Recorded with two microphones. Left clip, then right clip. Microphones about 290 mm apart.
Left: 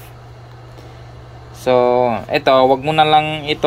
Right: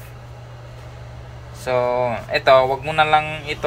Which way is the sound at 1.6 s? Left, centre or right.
Left.